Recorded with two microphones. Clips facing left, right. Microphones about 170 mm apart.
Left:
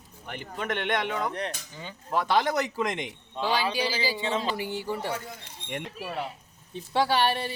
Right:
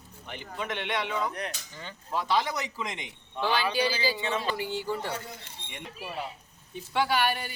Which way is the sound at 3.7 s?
20° left (ahead or behind).